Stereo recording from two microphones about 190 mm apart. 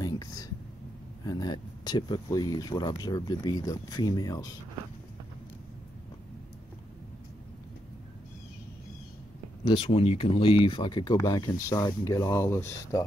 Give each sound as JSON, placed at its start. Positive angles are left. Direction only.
{"t": 0.0, "sound": "whispering", "side_deg": 20}
{"t": 1.2, "sound": "speech", "side_deg": 20}
{"t": 9.7, "sound": "speech", "side_deg": 30}